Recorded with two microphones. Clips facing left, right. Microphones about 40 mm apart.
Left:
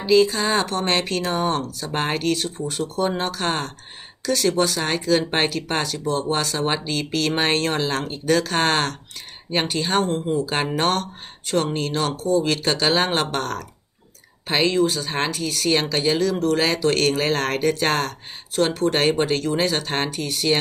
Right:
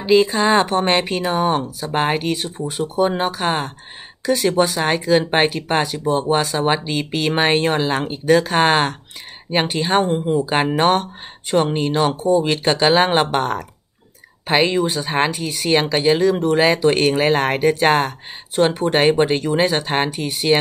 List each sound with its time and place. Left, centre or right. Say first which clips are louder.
0.0 s speech: right 3 dB; right